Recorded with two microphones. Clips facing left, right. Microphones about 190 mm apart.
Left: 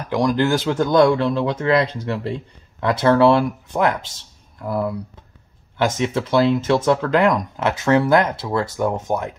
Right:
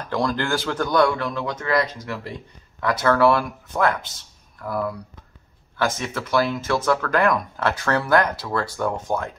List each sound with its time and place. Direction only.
0.0 s speech: 15° left (ahead or behind)